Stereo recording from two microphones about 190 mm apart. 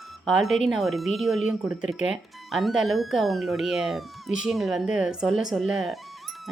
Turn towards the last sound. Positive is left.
turn(degrees=0)  # may be behind; listen again after turning